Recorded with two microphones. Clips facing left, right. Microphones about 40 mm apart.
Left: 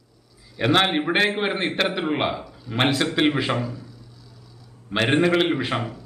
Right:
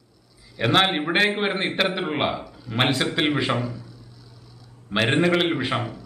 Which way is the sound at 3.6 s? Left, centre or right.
Right.